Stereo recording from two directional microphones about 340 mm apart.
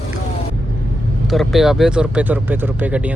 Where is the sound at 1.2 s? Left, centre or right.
Centre.